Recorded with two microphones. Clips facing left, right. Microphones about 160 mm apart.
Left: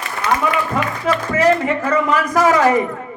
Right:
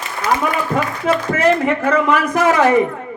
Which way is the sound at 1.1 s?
40° left (ahead or behind).